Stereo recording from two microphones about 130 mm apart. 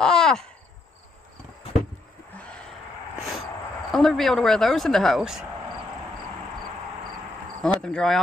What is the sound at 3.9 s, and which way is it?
Speech, centre (ahead or behind).